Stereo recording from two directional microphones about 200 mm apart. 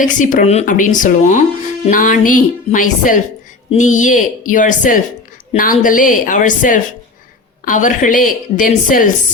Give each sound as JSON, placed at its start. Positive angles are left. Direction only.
{"t": 0.0, "sound": "a woman's voice", "side_deg": 40}